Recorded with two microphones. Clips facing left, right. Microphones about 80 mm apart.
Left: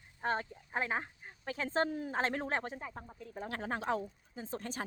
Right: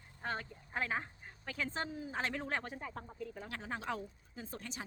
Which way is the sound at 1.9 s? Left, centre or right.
Left.